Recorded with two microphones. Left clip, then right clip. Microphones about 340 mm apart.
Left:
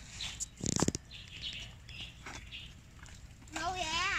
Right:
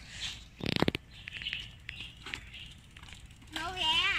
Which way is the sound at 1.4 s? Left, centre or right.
Centre.